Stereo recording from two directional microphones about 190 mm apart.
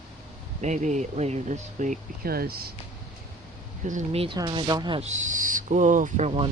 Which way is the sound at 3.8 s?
35° right (ahead or behind).